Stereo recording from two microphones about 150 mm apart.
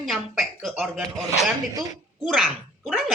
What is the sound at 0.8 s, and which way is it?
Speech, 10° right (ahead or behind).